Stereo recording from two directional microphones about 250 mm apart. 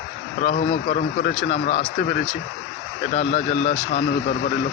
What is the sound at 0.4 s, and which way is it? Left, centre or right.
Speech, left.